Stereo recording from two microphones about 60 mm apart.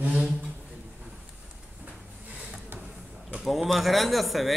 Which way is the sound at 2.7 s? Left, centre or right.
Right.